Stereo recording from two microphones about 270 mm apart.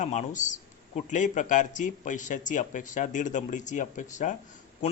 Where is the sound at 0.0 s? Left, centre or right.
Left.